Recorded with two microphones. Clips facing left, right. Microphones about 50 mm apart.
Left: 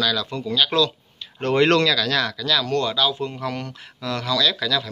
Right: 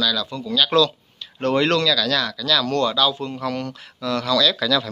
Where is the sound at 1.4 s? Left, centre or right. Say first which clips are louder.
Left 1 dB; left.